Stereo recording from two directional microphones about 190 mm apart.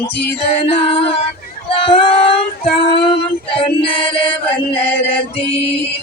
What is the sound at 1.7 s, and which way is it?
Child singing, 25° left (ahead or behind).